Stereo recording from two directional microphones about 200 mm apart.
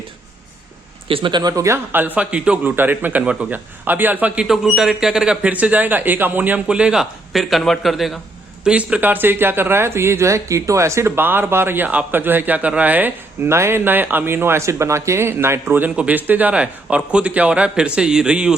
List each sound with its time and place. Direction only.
1.0 s speech: 25° right (ahead or behind); by 18.5 s 5° right (ahead or behind)